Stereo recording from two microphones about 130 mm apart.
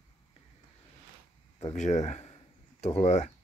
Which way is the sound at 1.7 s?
60° left (ahead or behind).